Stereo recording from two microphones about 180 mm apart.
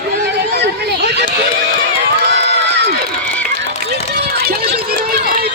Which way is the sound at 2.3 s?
70° right (ahead or behind).